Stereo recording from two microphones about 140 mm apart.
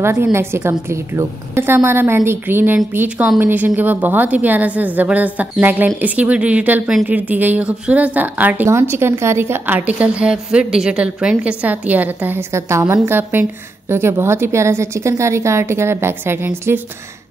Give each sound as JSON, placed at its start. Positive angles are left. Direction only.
{"t": 0.0, "sound": "a woman's voice", "side_deg": -20}